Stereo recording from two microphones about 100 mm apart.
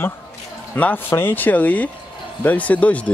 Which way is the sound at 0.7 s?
20° left (ahead or behind).